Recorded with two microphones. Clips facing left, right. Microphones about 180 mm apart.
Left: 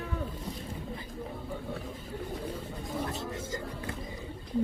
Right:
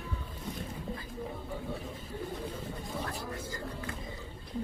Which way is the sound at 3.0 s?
25° left (ahead or behind).